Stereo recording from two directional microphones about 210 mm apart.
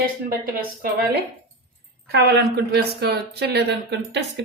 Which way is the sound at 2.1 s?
50° right (ahead or behind).